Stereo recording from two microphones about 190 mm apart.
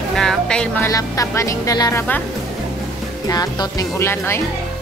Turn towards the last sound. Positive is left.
turn(degrees=15)  # may be behind; listen again after turning